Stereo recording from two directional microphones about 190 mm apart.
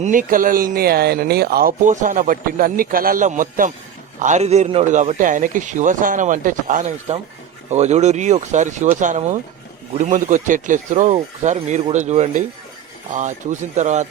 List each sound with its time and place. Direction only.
0.0 s a man's voice: 45° right (ahead or behind)